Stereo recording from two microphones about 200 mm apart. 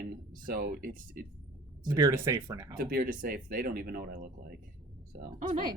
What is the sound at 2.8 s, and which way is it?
Speech, 45° right (ahead or behind).